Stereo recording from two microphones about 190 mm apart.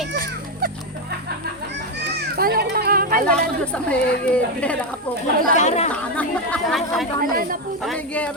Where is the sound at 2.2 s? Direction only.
55° right (ahead or behind).